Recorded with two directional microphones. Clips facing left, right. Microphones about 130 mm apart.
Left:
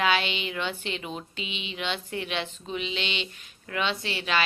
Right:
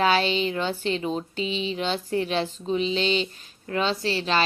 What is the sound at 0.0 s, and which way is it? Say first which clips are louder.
Speech: right 5 dB; 35° right (ahead or behind).